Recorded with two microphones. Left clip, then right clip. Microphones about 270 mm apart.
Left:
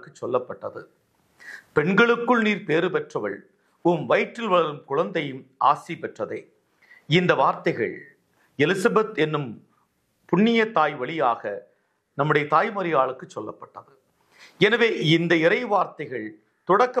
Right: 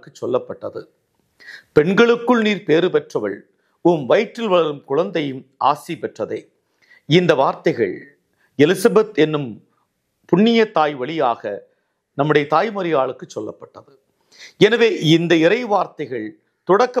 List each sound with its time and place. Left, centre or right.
0.0 s speech: right